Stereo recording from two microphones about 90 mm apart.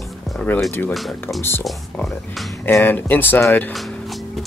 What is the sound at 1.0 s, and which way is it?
Speech, centre (ahead or behind).